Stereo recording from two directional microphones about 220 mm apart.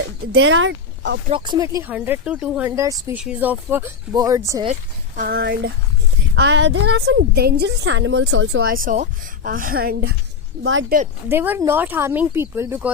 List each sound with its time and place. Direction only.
0.3 s speech: 60° right (ahead or behind)
1.3 s speech: 20° right (ahead or behind)
4.6 s a woman's voice: 35° right (ahead or behind); by 8.6 s 70° right (ahead or behind)
8.6 s a woman's voice: 40° right (ahead or behind)
10.6 s a woman's voice: 60° right (ahead or behind)
10.8 s a woman's voice: 40° right (ahead or behind)
11.3 s speech: 10° right (ahead or behind)